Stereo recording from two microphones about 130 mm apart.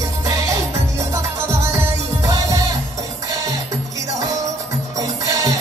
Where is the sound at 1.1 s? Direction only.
20° right (ahead or behind).